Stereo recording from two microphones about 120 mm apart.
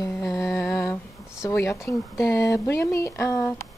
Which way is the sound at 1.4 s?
20° left (ahead or behind).